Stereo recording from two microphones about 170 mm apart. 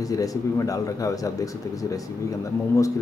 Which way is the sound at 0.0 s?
20° left (ahead or behind).